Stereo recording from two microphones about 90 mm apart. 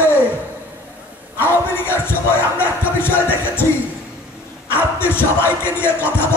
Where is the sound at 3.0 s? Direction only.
25° left (ahead or behind).